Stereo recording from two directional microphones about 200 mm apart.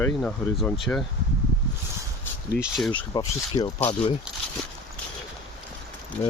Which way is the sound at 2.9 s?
20° left (ahead or behind).